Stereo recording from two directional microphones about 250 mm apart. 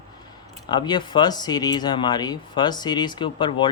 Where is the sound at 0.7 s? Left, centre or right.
Centre.